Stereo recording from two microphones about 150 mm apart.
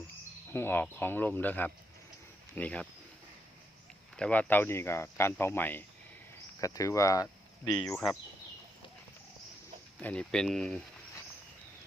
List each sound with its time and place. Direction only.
0.5 s speech: 15° left (ahead or behind)
4.2 s speech: 10° left (ahead or behind)
7.8 s speech: 10° left (ahead or behind)
10.0 s speech: 10° left (ahead or behind)